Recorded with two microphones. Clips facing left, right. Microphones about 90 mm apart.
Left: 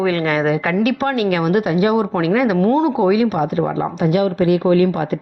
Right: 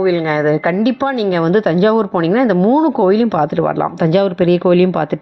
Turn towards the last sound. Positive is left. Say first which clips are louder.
# right 3 dB
turn(degrees=-70)  # may be behind; listen again after turning